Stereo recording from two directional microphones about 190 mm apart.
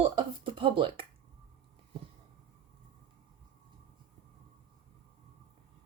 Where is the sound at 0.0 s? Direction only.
25° right (ahead or behind).